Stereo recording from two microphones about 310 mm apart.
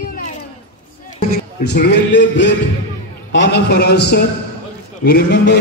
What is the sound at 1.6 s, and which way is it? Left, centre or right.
A man's voice, left.